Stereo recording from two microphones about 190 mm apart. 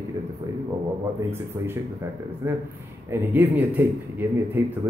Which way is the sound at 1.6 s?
10° right (ahead or behind).